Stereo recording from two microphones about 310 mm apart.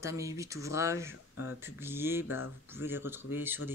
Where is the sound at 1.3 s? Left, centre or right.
Left.